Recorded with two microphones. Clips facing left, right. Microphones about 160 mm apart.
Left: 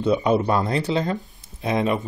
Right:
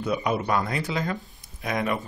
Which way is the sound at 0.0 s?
25° left (ahead or behind).